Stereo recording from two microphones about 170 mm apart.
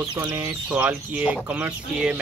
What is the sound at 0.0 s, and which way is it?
Speech, 20° right (ahead or behind).